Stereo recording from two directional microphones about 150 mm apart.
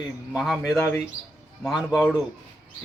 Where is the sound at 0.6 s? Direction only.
20° left (ahead or behind).